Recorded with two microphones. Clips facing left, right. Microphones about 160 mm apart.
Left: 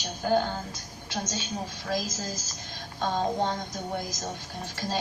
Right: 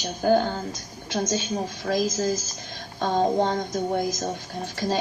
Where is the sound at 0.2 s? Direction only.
50° right (ahead or behind).